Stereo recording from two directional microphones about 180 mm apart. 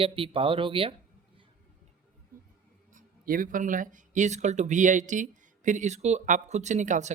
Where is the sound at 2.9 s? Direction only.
50° right (ahead or behind).